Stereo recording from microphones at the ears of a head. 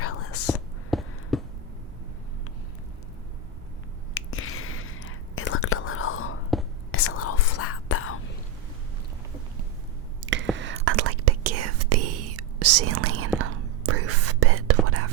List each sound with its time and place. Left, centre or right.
0.0 s whispering: left
4.1 s whispering: left
10.2 s whispering: right